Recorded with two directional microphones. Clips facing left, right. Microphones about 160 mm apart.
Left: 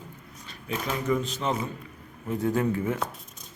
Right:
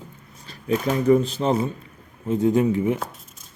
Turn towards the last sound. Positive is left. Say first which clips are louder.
# right 6 dB
turn(degrees=-20)  # may be behind; listen again after turning